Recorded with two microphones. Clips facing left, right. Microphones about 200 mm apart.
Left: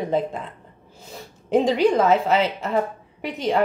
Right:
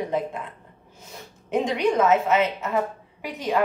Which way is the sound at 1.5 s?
35° left (ahead or behind).